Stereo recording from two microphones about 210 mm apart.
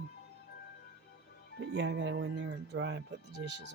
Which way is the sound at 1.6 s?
55° right (ahead or behind).